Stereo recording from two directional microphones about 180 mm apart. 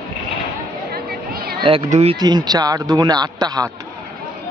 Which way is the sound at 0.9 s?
60° right (ahead or behind).